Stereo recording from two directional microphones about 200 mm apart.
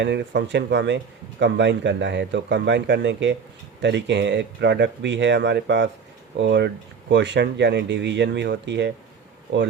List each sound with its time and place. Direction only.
0.0 s speech: 60° right (ahead or behind)